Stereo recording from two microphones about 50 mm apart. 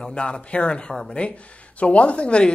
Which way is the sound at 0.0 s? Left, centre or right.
Centre.